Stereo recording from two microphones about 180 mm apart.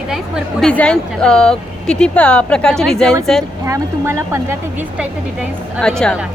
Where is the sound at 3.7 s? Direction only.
15° right (ahead or behind).